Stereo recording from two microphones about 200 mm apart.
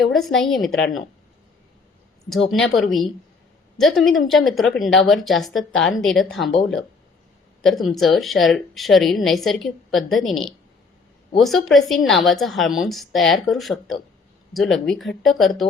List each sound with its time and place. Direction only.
0.0 s a woman's voice: centre (ahead or behind)
2.3 s a woman's voice: centre (ahead or behind)
7.6 s a woman's voice: centre (ahead or behind)